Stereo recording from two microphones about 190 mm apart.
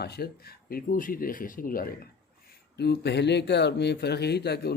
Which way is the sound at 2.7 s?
60° left (ahead or behind).